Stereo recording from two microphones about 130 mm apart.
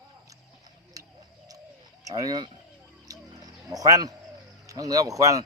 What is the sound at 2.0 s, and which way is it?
Speech, 30° right (ahead or behind).